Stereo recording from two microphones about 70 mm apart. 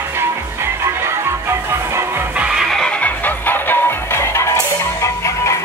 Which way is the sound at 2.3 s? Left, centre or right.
Centre.